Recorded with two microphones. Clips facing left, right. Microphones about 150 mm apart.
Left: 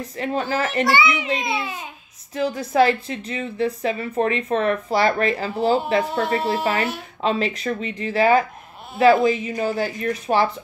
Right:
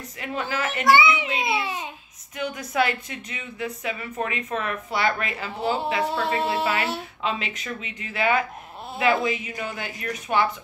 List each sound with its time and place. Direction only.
0.0 s speech: 35° left (ahead or behind)
0.9 s a child's voice: 25° right (ahead or behind)
2.3 s speech: 30° left (ahead or behind)